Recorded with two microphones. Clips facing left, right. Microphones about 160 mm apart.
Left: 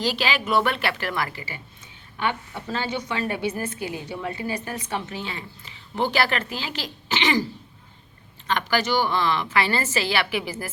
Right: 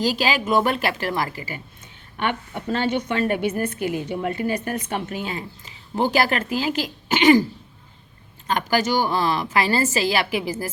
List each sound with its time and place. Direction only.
0.0 s a woman's voice: 40° right (ahead or behind)
2.1 s a woman's voice: 55° right (ahead or behind)
8.4 s a woman's voice: 45° right (ahead or behind)